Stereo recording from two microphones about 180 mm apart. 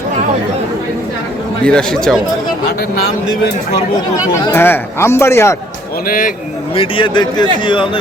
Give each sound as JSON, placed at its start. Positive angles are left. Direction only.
{"t": 1.6, "sound": "speech", "side_deg": 5}
{"t": 4.5, "sound": "speech", "side_deg": 10}
{"t": 6.1, "sound": "speech", "side_deg": 50}
{"t": 6.7, "sound": "a man's voice", "side_deg": 30}